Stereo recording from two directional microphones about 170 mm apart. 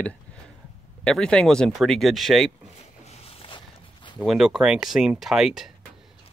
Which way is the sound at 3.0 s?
35° left (ahead or behind).